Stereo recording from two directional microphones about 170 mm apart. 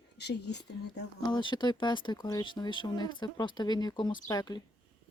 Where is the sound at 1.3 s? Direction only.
25° left (ahead or behind).